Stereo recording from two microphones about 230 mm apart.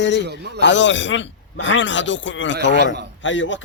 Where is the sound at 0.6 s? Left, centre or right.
Left.